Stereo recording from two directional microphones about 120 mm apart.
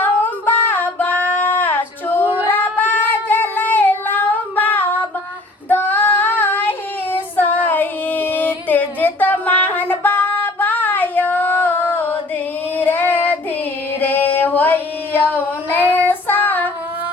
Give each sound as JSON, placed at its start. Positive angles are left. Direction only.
{"t": 0.0, "sound": "female singing", "side_deg": 15}
{"t": 2.5, "sound": "child singing", "side_deg": 15}
{"t": 12.7, "sound": "female singing", "side_deg": 15}
{"t": 14.0, "sound": "a sound", "side_deg": 15}
{"t": 16.0, "sound": "child singing", "side_deg": 15}